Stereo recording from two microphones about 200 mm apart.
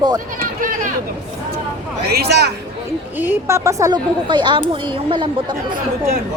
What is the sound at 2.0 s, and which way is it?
Speech, 55° right (ahead or behind).